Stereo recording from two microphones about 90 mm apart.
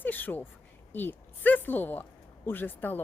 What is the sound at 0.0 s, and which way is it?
Speech, 20° left (ahead or behind).